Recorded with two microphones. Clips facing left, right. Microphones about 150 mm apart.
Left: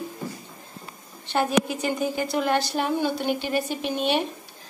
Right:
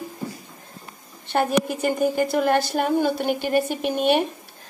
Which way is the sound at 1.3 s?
50° right (ahead or behind).